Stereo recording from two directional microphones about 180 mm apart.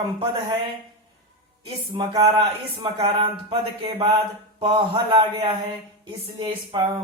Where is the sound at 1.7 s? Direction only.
30° right (ahead or behind).